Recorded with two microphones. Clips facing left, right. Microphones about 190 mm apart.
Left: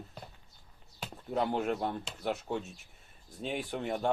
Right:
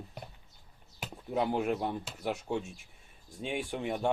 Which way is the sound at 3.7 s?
Centre (ahead or behind).